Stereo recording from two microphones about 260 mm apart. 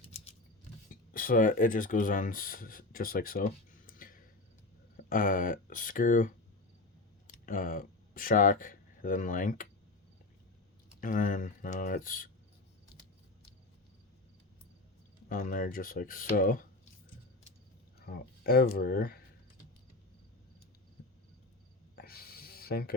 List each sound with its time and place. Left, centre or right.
1.1 s speech: left
11.0 s speech: left
15.3 s speech: left
18.0 s speech: left
21.0 s cricket: left
21.9 s a sound: left